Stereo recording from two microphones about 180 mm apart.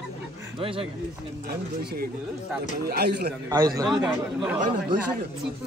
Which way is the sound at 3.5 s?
20° right (ahead or behind).